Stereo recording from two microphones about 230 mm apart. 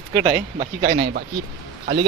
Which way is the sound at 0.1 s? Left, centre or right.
Right.